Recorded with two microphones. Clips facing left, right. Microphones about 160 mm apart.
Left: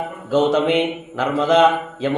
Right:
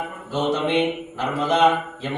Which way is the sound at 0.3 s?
90° left.